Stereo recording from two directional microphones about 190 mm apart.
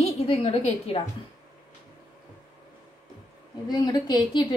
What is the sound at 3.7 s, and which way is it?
Speech, 20° left (ahead or behind).